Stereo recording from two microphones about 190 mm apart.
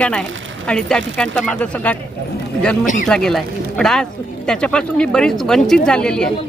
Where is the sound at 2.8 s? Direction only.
45° left (ahead or behind).